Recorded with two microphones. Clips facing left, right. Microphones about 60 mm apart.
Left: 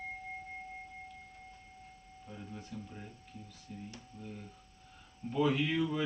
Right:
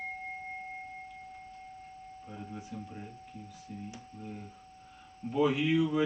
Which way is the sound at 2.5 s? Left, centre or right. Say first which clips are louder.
Right 2 dB; centre.